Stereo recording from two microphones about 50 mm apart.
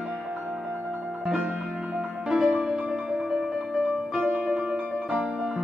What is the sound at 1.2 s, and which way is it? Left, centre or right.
Music, centre.